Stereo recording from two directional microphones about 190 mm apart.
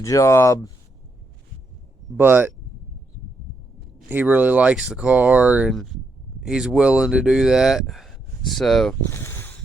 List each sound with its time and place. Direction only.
0.0 s speech: 15° left (ahead or behind)
2.1 s speech: 10° right (ahead or behind)
4.1 s speech: 10° right (ahead or behind)
9.0 s a sound: 15° left (ahead or behind)